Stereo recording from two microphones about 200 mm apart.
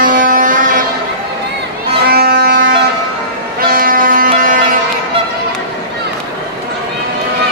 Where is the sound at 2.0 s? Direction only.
50° right (ahead or behind).